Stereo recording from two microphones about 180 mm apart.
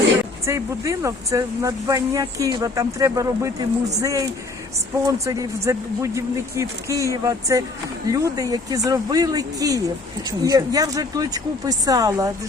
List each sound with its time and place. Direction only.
0.4 s speech: 15° right (ahead or behind)